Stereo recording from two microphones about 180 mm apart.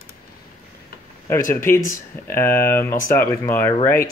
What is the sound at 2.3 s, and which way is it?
Speech, 15° left (ahead or behind).